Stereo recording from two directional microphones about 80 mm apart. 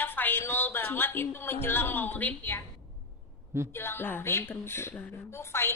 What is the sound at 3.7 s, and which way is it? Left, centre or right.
A woman's voice, left.